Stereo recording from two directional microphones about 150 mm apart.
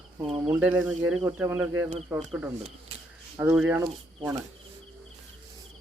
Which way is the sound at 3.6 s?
10° right (ahead or behind).